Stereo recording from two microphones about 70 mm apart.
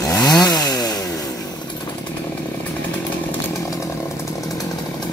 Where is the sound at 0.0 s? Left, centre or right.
Left.